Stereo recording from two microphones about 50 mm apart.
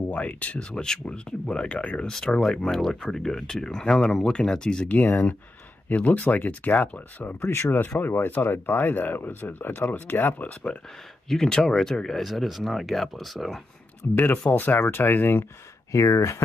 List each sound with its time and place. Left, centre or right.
0.1 s speech: left
0.6 s speech: centre
2.0 s speech: centre
5.9 s speech: left
7.4 s speech: left
11.2 s speech: centre
12.2 s speech: centre
14.0 s speech: left
15.9 s speech: left